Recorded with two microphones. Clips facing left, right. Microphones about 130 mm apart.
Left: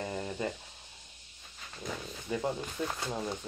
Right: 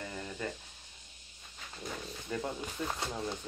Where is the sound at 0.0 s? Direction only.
25° left (ahead or behind).